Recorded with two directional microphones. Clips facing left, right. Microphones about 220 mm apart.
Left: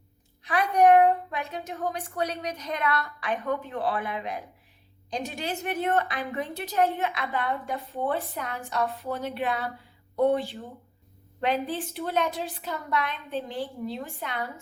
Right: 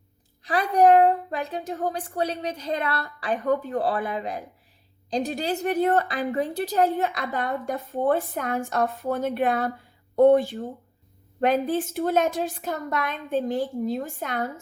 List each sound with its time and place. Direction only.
0.4 s a woman's voice: 30° right (ahead or behind)